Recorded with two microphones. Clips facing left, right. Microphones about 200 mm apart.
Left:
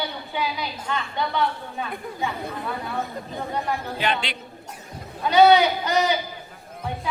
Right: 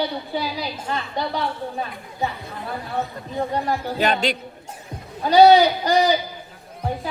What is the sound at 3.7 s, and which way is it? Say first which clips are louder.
Speech: right 3 dB; 40° right (ahead or behind).